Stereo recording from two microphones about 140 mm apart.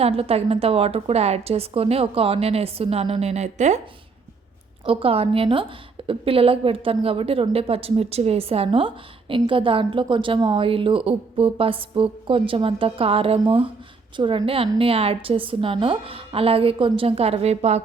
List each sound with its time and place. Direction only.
0.0 s a woman's voice: 45° right (ahead or behind)
4.9 s a woman's voice: 40° right (ahead or behind)